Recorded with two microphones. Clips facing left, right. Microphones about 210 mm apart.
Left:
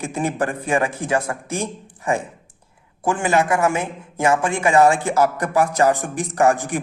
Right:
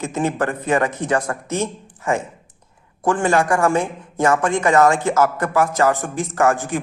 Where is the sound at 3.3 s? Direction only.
20° left (ahead or behind).